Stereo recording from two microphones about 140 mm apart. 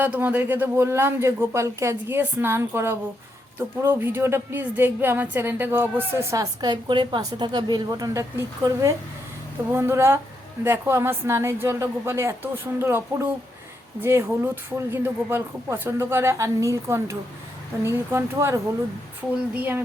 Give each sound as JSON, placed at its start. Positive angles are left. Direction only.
{"t": 0.0, "sound": "a woman's voice", "side_deg": -10}